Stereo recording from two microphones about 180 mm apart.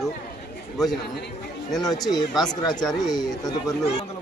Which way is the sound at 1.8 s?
20° left (ahead or behind).